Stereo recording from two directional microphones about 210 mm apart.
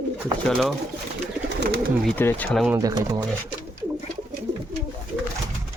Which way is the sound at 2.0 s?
10° left (ahead or behind).